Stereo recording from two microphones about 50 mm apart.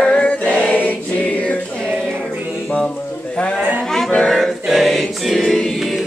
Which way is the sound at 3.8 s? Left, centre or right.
Centre.